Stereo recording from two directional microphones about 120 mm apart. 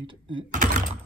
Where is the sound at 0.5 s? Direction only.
90° right.